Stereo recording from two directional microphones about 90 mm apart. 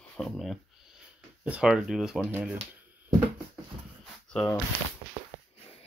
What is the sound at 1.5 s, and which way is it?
Speech, 10° right (ahead or behind).